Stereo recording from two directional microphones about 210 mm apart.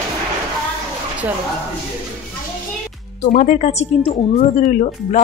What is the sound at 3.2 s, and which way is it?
Speech, 40° left (ahead or behind).